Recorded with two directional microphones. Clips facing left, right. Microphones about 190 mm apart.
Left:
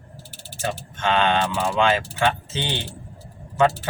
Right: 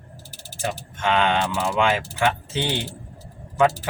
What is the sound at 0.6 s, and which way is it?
Speech, 15° right (ahead or behind).